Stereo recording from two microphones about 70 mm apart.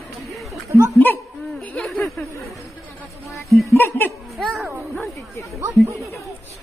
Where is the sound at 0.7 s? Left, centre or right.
Right.